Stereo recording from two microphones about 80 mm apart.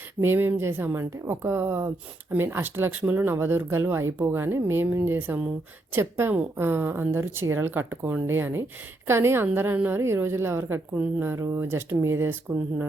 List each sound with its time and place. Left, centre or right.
0.2 s speech: right